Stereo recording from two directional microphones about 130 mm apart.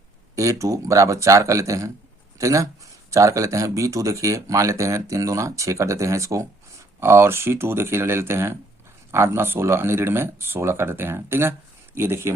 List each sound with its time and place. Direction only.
0.3 s speech: 25° right (ahead or behind)